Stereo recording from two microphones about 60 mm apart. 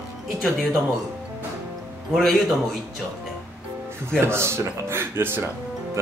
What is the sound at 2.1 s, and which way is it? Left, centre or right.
Speech, centre.